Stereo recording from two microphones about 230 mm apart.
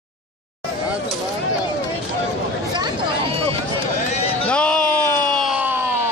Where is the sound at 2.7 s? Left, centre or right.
Centre.